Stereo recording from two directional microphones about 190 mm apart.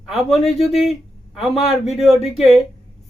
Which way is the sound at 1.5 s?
30° left (ahead or behind).